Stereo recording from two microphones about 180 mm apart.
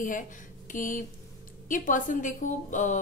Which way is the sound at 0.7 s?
45° left (ahead or behind).